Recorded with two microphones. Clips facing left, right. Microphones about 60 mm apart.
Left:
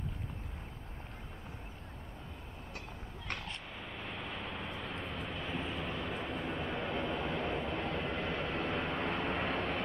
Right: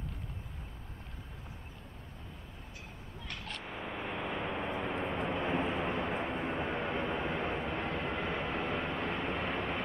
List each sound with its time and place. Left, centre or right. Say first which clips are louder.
3.6 s vehicle: right 5 dB; centre